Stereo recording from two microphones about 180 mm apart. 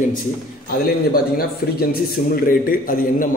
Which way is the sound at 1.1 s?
60° left (ahead or behind).